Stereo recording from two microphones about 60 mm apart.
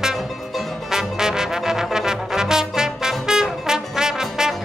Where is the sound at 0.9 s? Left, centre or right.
Centre.